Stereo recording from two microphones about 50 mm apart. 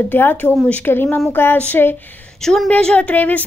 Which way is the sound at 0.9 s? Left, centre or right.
Left.